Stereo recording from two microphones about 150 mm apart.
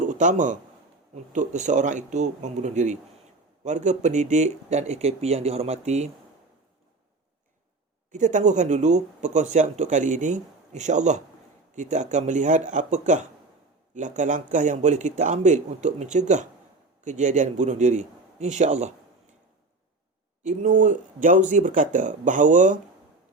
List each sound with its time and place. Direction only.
0.1 s speech: 55° right (ahead or behind)
8.1 s speech: 55° right (ahead or behind)
20.4 s speech: 60° right (ahead or behind)